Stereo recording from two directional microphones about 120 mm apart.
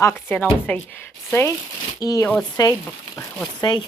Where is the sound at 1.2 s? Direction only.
20° left (ahead or behind).